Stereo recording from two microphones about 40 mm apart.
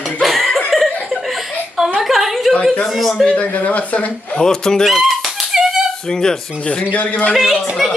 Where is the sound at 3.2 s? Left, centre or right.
Left.